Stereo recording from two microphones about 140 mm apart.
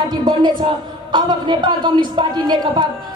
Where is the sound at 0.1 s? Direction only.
30° right (ahead or behind).